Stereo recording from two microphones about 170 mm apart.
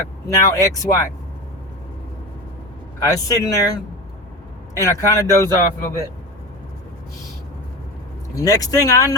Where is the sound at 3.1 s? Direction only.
20° left (ahead or behind).